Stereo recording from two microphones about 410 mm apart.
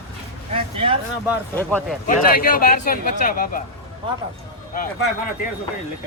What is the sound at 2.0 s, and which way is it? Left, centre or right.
A man's voice, left.